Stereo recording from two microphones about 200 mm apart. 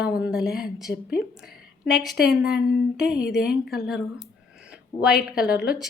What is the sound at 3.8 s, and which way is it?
Speech, centre (ahead or behind).